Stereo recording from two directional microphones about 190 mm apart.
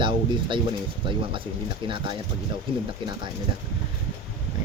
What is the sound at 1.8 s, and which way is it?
Speech, 25° right (ahead or behind).